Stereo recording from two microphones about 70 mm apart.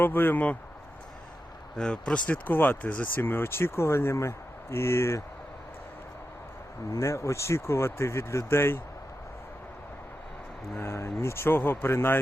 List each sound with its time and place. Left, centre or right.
0.0 s speech: left
1.7 s speech: centre; by 5.2 s left
7.0 s speech: left
10.8 s speech: left